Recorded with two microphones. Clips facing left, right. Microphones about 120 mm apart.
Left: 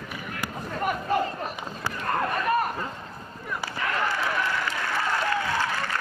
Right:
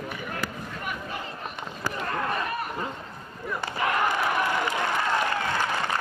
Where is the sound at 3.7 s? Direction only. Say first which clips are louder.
Right 3 dB; 20° right (ahead or behind).